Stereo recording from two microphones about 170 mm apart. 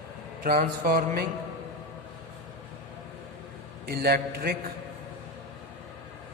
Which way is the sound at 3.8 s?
65° right (ahead or behind).